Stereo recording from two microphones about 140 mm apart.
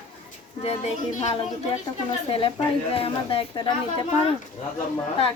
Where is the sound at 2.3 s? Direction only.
40° left (ahead or behind).